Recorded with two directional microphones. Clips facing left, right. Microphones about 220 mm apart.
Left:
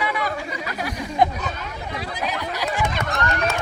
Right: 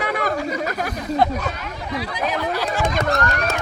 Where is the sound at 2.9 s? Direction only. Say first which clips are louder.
Right 5 dB; 40° right (ahead or behind).